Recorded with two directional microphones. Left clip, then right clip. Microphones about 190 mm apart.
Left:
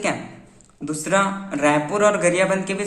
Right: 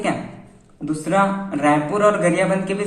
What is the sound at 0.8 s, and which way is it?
A man's voice, 40° left (ahead or behind).